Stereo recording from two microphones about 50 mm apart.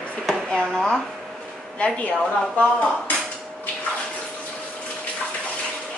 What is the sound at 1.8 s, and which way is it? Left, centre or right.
Speech, left.